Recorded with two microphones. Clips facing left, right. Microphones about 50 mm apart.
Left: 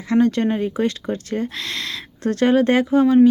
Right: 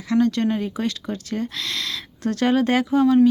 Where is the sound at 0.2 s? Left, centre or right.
Centre.